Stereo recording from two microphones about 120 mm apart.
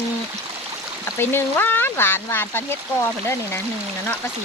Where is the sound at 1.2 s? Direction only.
20° left (ahead or behind).